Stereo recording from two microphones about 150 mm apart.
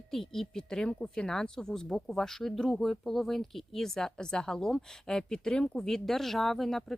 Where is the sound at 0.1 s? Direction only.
Centre (ahead or behind).